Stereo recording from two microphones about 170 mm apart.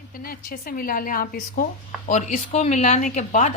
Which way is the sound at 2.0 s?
45° left (ahead or behind).